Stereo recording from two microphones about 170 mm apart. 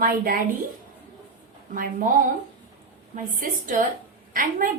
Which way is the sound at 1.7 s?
55° right (ahead or behind).